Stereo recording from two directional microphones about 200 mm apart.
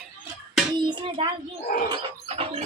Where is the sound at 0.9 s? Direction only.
25° right (ahead or behind).